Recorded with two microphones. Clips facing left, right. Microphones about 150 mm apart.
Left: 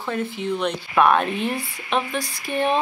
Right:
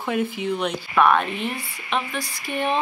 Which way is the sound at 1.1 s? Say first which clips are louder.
Left 2 dB; 35° left (ahead or behind).